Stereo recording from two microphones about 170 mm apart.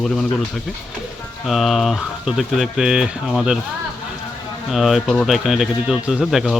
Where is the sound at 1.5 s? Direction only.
Centre (ahead or behind).